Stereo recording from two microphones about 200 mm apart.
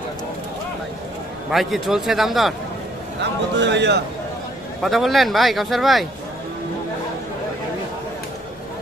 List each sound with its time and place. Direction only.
1.5 s speech: centre (ahead or behind)
3.2 s speech: 60° right (ahead or behind)
4.8 s speech: centre (ahead or behind)